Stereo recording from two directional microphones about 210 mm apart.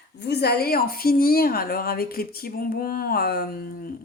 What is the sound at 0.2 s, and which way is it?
Speech, 50° left (ahead or behind).